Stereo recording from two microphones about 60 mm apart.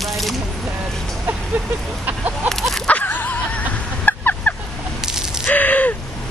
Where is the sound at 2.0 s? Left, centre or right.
Right.